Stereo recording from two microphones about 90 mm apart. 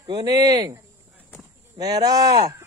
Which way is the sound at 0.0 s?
50° right (ahead or behind).